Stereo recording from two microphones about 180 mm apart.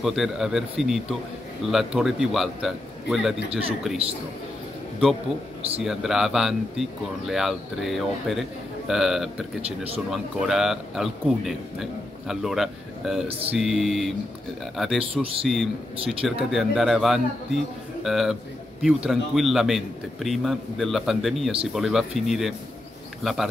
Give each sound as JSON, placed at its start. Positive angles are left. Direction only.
{"t": 0.0, "sound": "a man's voice", "side_deg": 0}
{"t": 5.9, "sound": "a man's voice", "side_deg": -5}
{"t": 9.7, "sound": "speech", "side_deg": -35}
{"t": 10.4, "sound": "a man's voice", "side_deg": 0}